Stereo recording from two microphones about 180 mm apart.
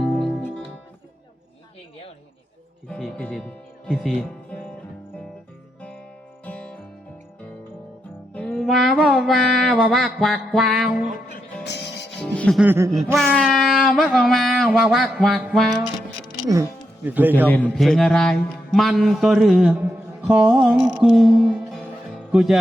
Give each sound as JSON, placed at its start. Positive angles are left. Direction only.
{"t": 0.0, "sound": "music", "side_deg": -5}
{"t": 2.9, "sound": "a man's voice", "side_deg": 5}
{"t": 6.4, "sound": "music", "side_deg": 5}
{"t": 8.3, "sound": "music", "side_deg": 5}
{"t": 11.6, "sound": "music", "side_deg": 70}
{"t": 12.2, "sound": "music", "side_deg": 5}
{"t": 12.5, "sound": "speech", "side_deg": -10}
{"t": 13.3, "sound": "a sound", "side_deg": 0}
{"t": 16.5, "sound": "speech", "side_deg": -15}
{"t": 17.3, "sound": "a man's voice", "side_deg": 10}
{"t": 20.2, "sound": "music", "side_deg": -5}
{"t": 22.3, "sound": "speech", "side_deg": -5}